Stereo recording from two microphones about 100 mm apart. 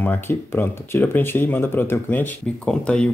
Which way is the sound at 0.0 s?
20° left (ahead or behind).